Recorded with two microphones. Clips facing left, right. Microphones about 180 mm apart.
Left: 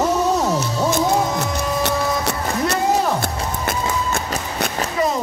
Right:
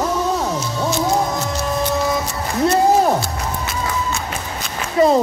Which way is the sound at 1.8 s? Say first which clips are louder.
Right 2 dB; 70° left (ahead or behind).